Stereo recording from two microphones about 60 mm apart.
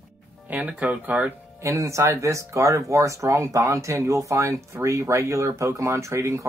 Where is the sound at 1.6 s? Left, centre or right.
Right.